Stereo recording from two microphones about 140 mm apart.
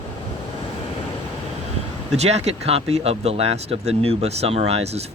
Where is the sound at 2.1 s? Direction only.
50° right (ahead or behind).